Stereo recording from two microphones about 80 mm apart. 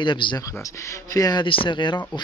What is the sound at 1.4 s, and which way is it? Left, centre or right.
Speech, left.